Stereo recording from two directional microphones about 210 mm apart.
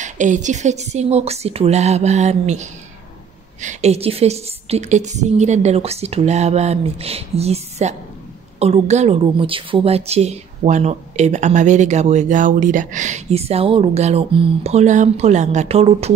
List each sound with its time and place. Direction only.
0.0 s a woman's voice: 35° right (ahead or behind)